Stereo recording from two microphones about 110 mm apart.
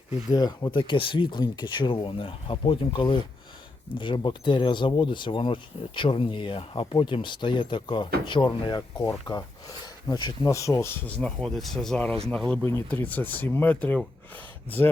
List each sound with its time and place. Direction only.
0.3 s speech: 35° left (ahead or behind)
10.5 s speech: 30° left (ahead or behind)
11.0 s speech: 5° left (ahead or behind)
12.6 s speech: 20° left (ahead or behind)